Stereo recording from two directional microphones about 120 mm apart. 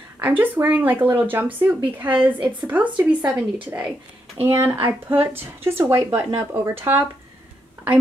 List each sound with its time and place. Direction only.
0.2 s speech: 15° right (ahead or behind)